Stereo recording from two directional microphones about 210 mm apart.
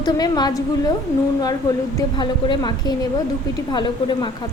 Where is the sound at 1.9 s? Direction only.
20° left (ahead or behind).